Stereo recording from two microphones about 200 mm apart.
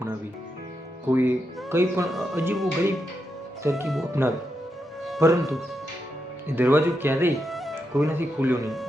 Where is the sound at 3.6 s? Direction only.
15° right (ahead or behind).